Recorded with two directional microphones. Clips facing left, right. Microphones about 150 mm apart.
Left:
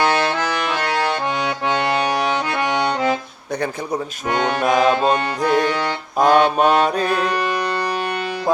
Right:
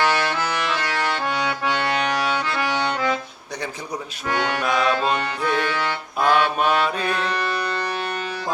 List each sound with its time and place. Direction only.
0.0 s music: 35° left (ahead or behind)
1.2 s accordion: 20° left (ahead or behind)
4.3 s music: 25° left (ahead or behind)
4.6 s accordion: 45° left (ahead or behind)
5.0 s music: 40° left (ahead or behind)